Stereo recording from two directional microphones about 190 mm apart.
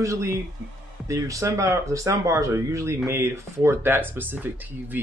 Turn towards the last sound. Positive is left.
turn(degrees=-10)  # may be behind; listen again after turning